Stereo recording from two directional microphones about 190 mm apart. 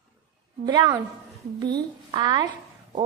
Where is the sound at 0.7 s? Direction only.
20° right (ahead or behind).